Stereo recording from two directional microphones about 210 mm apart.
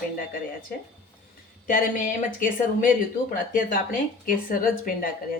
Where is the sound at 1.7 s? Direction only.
35° left (ahead or behind).